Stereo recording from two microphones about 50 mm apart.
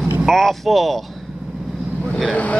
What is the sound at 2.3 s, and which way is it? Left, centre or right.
Speech, left.